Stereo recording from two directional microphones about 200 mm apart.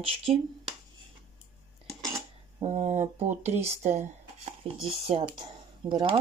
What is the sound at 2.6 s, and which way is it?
Speech, 35° right (ahead or behind).